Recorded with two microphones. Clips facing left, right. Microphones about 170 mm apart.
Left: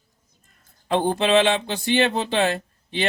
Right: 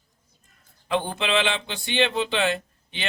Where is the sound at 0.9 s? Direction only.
40° left (ahead or behind).